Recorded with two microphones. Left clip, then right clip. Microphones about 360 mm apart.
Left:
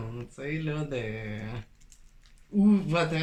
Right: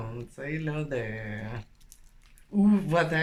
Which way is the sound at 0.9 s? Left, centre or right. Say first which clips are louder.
Right 1 dB; centre.